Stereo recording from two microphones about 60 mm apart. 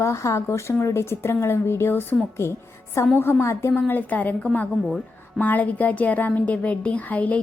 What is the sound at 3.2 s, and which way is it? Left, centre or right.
Speech, left.